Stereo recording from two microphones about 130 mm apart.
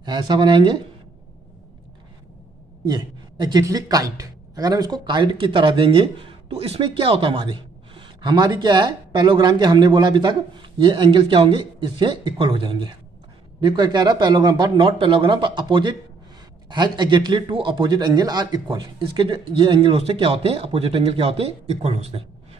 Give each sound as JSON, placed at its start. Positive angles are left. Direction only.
{"t": 0.0, "sound": "speech", "side_deg": -35}
{"t": 2.9, "sound": "speech", "side_deg": -35}